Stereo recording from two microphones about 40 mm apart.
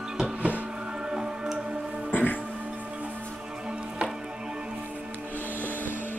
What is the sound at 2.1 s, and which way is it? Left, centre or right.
Music, left.